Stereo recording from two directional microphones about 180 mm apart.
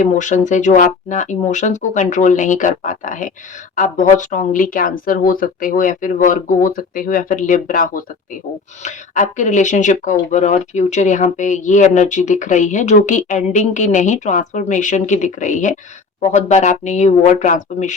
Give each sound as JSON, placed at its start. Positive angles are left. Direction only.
{"t": 0.0, "sound": "speech", "side_deg": 45}